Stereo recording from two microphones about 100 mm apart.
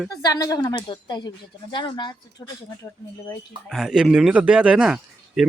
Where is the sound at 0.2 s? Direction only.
40° left (ahead or behind).